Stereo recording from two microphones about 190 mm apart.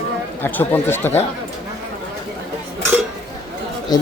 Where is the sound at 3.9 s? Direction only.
20° left (ahead or behind).